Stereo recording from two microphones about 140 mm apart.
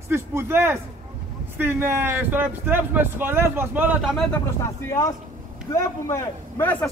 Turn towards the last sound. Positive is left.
turn(degrees=15)  # may be behind; listen again after turning